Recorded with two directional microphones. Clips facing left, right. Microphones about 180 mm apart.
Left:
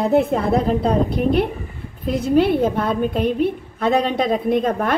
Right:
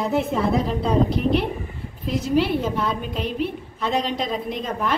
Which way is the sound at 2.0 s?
55° left (ahead or behind).